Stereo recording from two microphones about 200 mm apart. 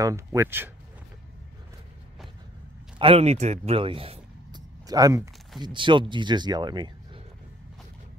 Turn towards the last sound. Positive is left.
turn(degrees=-20)  # may be behind; listen again after turning